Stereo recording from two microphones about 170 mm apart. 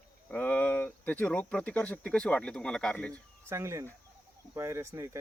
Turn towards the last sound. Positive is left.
turn(degrees=-15)  # may be behind; listen again after turning